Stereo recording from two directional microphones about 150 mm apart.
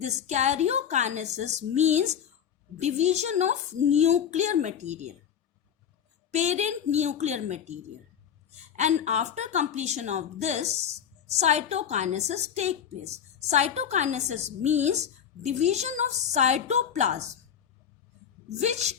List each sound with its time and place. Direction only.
0.0 s a woman's voice: 50° right (ahead or behind)
6.3 s a woman's voice: 50° right (ahead or behind)
18.4 s a woman's voice: 50° right (ahead or behind)